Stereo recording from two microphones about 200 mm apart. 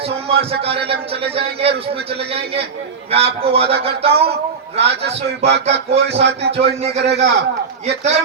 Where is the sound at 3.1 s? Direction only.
30° right (ahead or behind).